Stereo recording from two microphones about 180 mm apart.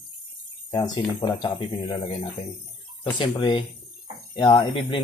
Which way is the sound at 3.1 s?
25° left (ahead or behind).